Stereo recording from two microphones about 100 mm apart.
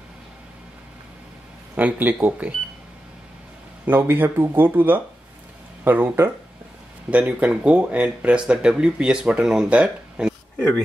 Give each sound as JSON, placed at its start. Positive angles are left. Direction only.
{"t": 1.8, "sound": "speech", "side_deg": -15}
{"t": 3.8, "sound": "speech", "side_deg": -20}